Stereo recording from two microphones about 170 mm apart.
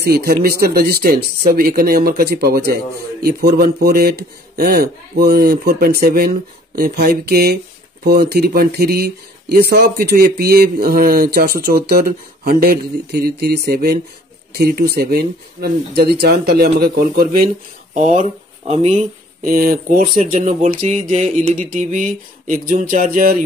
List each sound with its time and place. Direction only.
0.0 s speech: 65° right (ahead or behind)
17.9 s speech: 45° right (ahead or behind)
19.4 s speech: 55° right (ahead or behind)